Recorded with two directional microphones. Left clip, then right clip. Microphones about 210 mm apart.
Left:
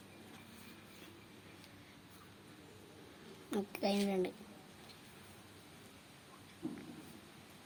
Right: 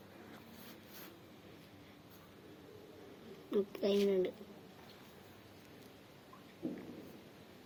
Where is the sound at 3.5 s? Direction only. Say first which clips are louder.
Right 3 dB; 60° left (ahead or behind).